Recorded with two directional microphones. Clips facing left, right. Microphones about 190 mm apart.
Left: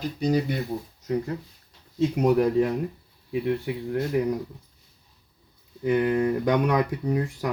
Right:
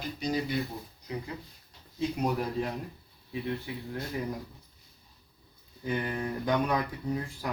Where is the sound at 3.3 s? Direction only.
65° left (ahead or behind).